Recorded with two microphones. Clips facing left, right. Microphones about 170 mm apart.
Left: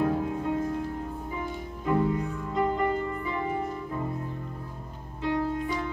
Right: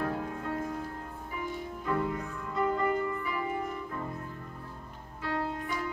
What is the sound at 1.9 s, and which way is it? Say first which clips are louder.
Music: left 6 dB; 20° left (ahead or behind).